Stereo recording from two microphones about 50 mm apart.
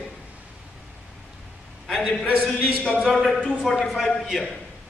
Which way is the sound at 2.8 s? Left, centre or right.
Centre.